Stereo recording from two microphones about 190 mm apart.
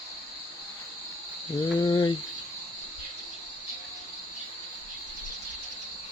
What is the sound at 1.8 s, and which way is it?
Speech, 25° left (ahead or behind).